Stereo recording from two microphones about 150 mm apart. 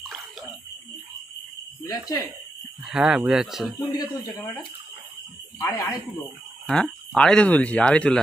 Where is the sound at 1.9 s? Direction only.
25° left (ahead or behind).